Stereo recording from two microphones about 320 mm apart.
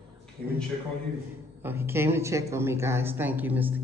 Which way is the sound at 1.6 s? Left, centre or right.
Centre.